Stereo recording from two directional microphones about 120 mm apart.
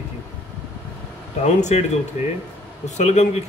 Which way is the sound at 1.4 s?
70° left (ahead or behind).